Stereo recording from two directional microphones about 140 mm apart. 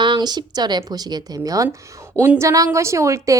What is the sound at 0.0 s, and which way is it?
Speech, 30° right (ahead or behind).